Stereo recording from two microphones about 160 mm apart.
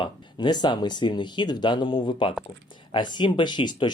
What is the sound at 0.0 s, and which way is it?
Speech, 30° left (ahead or behind).